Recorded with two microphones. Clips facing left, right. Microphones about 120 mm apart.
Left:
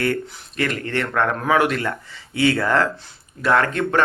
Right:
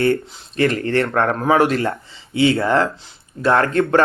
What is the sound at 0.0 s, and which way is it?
Speech, 30° right (ahead or behind).